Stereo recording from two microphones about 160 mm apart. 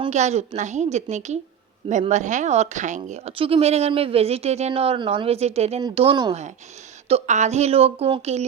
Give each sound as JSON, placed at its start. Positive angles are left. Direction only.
{"t": 0.1, "sound": "a woman's voice", "side_deg": -45}